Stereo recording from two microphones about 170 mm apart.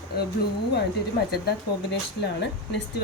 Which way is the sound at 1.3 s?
70° left (ahead or behind).